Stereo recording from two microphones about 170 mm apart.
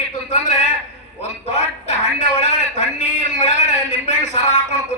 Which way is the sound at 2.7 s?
45° left (ahead or behind).